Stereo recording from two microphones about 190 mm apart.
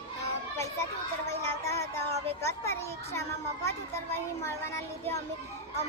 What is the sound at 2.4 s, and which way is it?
Speech, 15° left (ahead or behind).